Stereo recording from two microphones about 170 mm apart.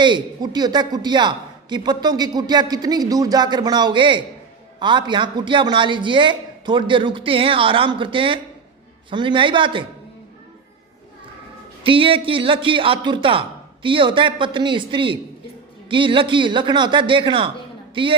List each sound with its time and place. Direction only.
0.0 s a man's voice: 25° right (ahead or behind)
11.9 s a man's voice: 30° right (ahead or behind)